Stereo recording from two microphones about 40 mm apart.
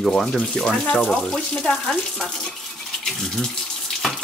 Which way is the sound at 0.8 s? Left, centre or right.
Left.